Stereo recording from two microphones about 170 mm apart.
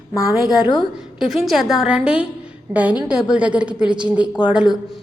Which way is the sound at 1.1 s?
Centre (ahead or behind).